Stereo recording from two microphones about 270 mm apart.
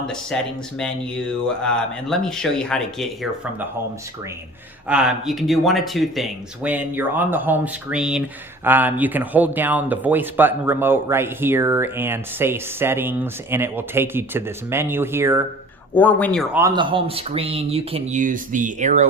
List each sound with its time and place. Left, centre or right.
0.0 s speech: centre
1.5 s speech: centre
4.9 s speech: centre
16.0 s speech: centre
16.6 s speech: centre